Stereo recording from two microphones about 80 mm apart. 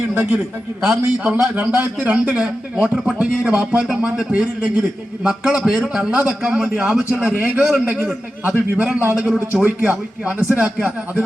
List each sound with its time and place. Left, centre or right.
0.1 s a man's voice: right